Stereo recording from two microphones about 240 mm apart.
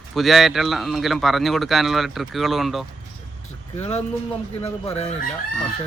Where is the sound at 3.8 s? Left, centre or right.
Left.